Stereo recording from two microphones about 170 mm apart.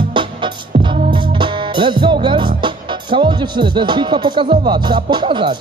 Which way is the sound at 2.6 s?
30° right (ahead or behind).